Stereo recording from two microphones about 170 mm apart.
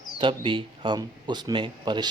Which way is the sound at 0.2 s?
30° right (ahead or behind).